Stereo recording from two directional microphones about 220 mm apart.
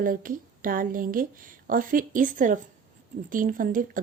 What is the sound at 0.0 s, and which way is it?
A woman's voice, 40° right (ahead or behind).